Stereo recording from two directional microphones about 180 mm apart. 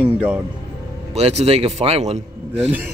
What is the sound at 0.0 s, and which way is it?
Music, 5° right (ahead or behind).